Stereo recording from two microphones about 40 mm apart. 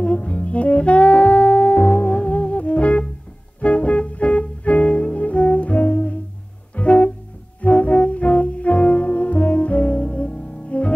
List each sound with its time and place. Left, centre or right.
0.0 s saxophone: left
3.6 s music: left